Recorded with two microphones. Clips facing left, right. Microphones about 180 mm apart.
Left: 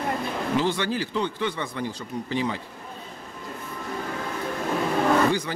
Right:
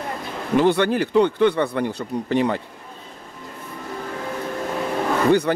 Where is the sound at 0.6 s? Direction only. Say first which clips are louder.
Right 10 dB; 60° right (ahead or behind).